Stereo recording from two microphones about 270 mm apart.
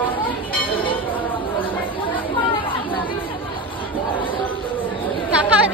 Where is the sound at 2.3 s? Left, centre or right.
Centre.